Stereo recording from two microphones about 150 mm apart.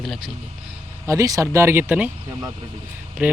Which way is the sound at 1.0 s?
20° right (ahead or behind).